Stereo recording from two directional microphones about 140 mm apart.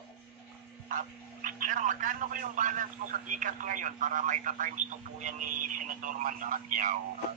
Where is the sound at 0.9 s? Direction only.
75° right (ahead or behind).